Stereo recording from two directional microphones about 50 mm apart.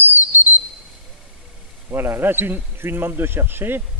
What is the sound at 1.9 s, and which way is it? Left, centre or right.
A man's voice, right.